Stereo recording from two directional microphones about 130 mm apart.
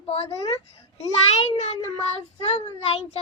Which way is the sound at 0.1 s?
55° left (ahead or behind).